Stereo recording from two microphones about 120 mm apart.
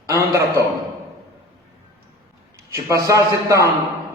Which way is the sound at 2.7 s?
25° right (ahead or behind).